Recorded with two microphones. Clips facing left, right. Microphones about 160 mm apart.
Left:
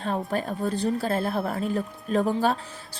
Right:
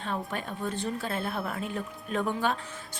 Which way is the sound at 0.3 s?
35° left (ahead or behind).